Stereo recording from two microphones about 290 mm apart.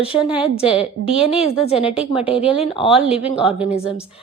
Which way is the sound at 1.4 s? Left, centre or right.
Left.